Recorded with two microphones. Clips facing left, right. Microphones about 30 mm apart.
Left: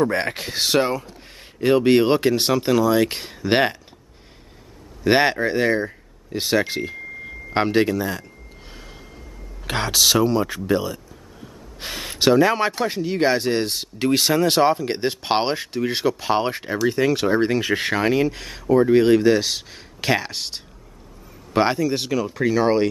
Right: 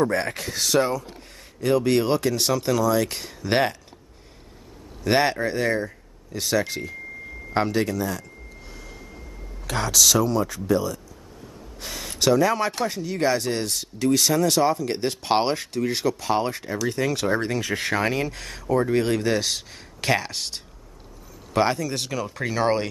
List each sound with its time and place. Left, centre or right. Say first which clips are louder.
0.0 s speech: left 2 dB; left
5.0 s speech: left 3 dB; left
9.7 s speech: left 2 dB; left; by 22.8 s centre